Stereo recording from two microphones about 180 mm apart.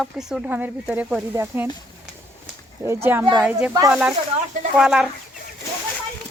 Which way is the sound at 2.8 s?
15° right (ahead or behind).